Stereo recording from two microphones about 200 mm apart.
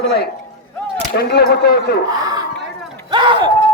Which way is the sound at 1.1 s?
50° left (ahead or behind).